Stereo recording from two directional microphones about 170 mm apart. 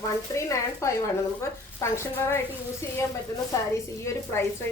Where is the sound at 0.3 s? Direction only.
20° left (ahead or behind).